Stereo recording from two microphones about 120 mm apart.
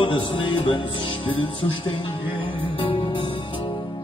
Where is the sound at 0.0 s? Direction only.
45° left (ahead or behind).